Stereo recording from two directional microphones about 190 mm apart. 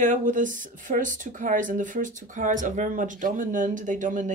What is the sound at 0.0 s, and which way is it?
Speech, 40° right (ahead or behind).